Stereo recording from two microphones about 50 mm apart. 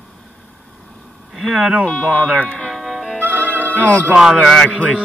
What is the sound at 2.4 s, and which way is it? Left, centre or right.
Music, centre.